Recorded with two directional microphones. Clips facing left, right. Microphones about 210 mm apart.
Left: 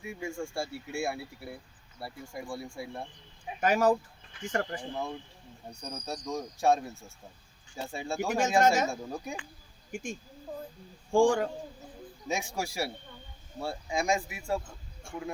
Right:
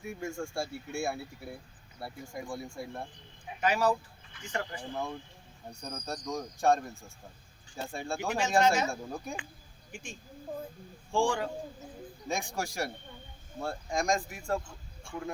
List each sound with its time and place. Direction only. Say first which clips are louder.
0.0 s speech: even; centre (ahead or behind)
3.6 s speech: left 3 dB; 45° left (ahead or behind)
4.8 s speech: left 1 dB; 5° left (ahead or behind)
8.4 s speech: left 2 dB; 45° left (ahead or behind)
8.9 s speech: left 1 dB; 5° left (ahead or behind)
9.9 s speech: left 7 dB; 45° left (ahead or behind)
12.3 s a man's voice: left 1 dB; 5° left (ahead or behind)
15.1 s speech: even; 50° left (ahead or behind)